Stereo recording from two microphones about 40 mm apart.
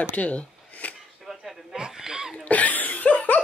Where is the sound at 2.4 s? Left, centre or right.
Left.